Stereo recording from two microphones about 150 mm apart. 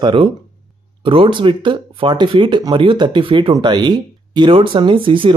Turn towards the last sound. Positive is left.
turn(degrees=-35)  # may be behind; listen again after turning